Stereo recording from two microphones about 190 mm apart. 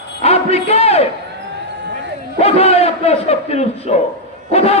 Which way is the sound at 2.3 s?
35° left (ahead or behind).